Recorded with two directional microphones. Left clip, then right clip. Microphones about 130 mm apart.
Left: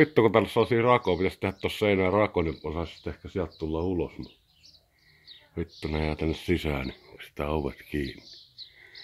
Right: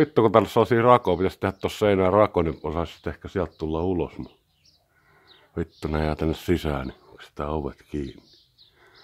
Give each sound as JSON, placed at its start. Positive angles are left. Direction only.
{"t": 0.3, "sound": "speech", "side_deg": -50}
{"t": 5.5, "sound": "speech", "side_deg": -45}
{"t": 6.9, "sound": "speech", "side_deg": -20}